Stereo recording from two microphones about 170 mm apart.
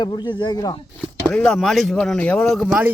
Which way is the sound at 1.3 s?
5° left (ahead or behind).